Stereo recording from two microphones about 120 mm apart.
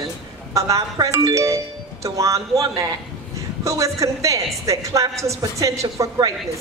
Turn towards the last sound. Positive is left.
turn(degrees=-25)  # may be behind; listen again after turning